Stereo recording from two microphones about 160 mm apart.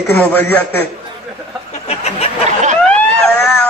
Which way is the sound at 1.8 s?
40° left (ahead or behind).